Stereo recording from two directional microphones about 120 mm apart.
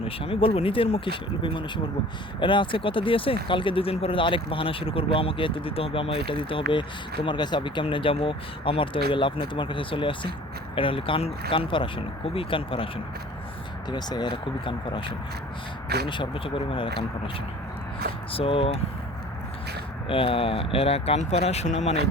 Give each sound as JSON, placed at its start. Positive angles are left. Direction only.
{"t": 0.0, "sound": "speech", "side_deg": 50}
{"t": 13.9, "sound": "speech", "side_deg": 35}
{"t": 20.1, "sound": "speech", "side_deg": 50}